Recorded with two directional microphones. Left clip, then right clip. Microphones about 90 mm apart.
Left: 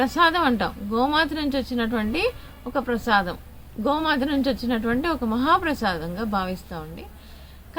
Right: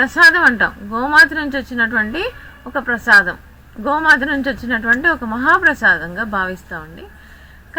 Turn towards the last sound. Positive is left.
turn(degrees=10)  # may be behind; listen again after turning